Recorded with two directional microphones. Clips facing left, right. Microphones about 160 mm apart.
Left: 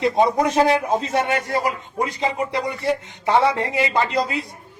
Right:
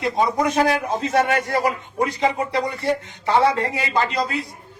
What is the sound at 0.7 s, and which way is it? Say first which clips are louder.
Speech: left 1 dB; 20° left (ahead or behind).